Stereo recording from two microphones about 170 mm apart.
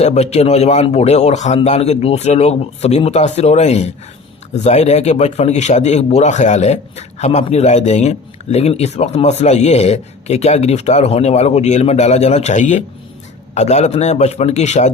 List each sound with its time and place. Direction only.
0.0 s a man's voice: 40° left (ahead or behind)